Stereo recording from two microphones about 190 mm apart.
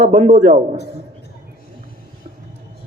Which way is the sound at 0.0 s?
45° right (ahead or behind).